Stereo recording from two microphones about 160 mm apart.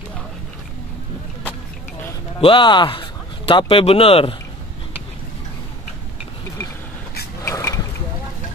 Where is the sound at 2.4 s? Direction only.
30° left (ahead or behind).